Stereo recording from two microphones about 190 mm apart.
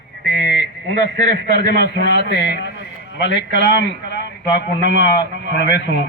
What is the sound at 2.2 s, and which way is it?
A man's voice, 60° left (ahead or behind).